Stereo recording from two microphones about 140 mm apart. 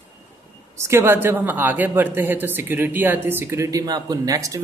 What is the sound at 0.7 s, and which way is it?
A woman's voice, 20° right (ahead or behind).